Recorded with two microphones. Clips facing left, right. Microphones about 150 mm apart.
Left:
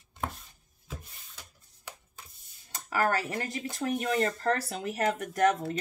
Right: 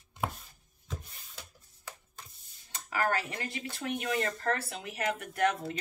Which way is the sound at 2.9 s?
40° left (ahead or behind).